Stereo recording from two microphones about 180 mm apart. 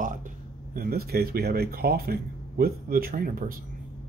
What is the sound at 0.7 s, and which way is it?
Speech, 55° right (ahead or behind).